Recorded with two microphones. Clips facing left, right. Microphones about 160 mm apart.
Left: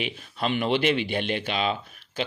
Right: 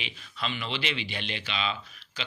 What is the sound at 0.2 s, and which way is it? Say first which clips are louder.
Speech: left 7 dB; 50° left (ahead or behind).